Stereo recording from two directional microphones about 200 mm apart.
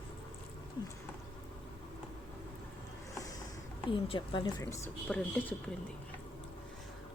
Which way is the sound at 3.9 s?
25° left (ahead or behind).